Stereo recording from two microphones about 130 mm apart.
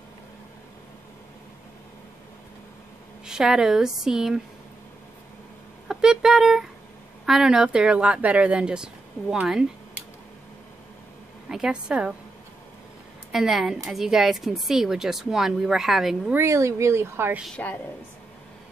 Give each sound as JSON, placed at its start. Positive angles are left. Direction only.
{"t": 3.3, "sound": "a woman's voice", "side_deg": -5}
{"t": 5.9, "sound": "a sound", "side_deg": -5}
{"t": 7.2, "sound": "speech", "side_deg": -5}
{"t": 11.4, "sound": "speech", "side_deg": -5}
{"t": 13.3, "sound": "a woman's voice", "side_deg": -5}
{"t": 16.3, "sound": "speech", "side_deg": -20}
{"t": 17.6, "sound": "a woman's voice", "side_deg": 10}